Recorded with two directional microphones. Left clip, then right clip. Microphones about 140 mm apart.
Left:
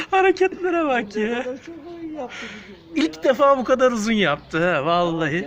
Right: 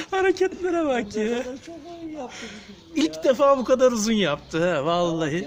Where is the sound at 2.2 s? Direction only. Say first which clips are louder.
Left 4 dB; 15° right (ahead or behind).